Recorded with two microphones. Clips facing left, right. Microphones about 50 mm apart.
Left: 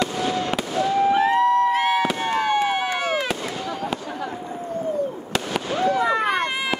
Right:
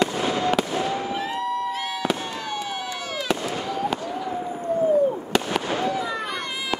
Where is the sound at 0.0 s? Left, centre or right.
Right.